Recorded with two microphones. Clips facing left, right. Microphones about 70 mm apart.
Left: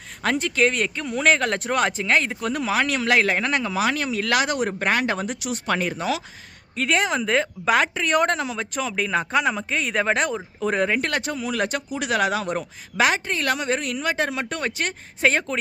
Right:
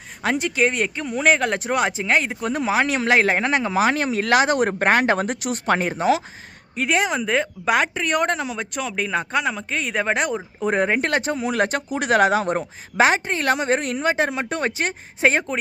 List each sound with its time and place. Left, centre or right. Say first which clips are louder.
0.2 s speech: right 1 dB; centre
2.4 s speech: right 2 dB; right
5.7 s speech: right 5 dB; right
6.7 s a woman's voice: right 1 dB; centre